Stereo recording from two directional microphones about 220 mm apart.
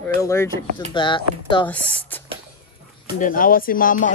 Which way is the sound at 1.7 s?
5° left (ahead or behind).